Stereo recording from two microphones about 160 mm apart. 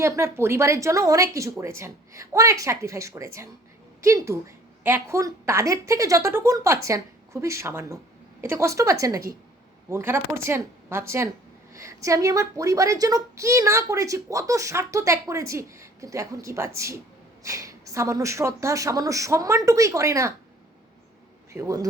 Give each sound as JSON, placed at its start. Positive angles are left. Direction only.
{"t": 0.0, "sound": "a woman's voice", "side_deg": -15}
{"t": 21.5, "sound": "a woman's voice", "side_deg": -20}